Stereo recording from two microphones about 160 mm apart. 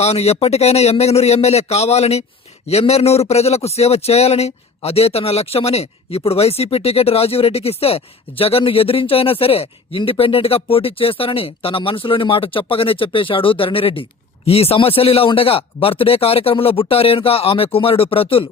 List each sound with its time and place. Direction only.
0.0 s speech: 40° left (ahead or behind)